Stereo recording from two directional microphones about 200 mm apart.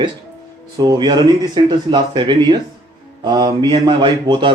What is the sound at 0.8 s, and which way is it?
Mantra, 20° right (ahead or behind).